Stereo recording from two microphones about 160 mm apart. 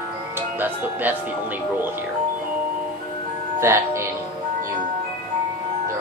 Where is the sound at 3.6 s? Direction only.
15° right (ahead or behind).